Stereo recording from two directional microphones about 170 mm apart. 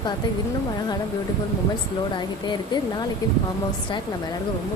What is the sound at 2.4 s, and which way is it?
Speech, 25° left (ahead or behind).